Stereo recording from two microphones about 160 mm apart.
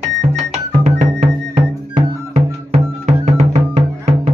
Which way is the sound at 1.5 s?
40° right (ahead or behind).